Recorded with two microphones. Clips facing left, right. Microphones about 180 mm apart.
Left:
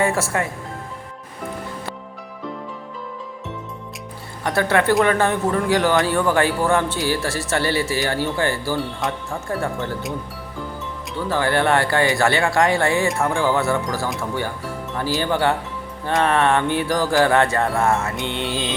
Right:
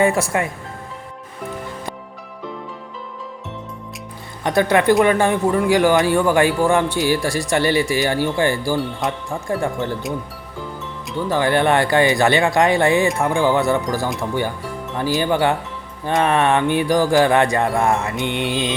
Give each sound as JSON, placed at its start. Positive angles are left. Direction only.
{"t": 0.0, "sound": "speech", "side_deg": -15}
{"t": 4.4, "sound": "speech", "side_deg": -15}
{"t": 9.0, "sound": "speech", "side_deg": 0}
{"t": 9.5, "sound": "speech", "side_deg": -15}
{"t": 11.3, "sound": "speech", "side_deg": -15}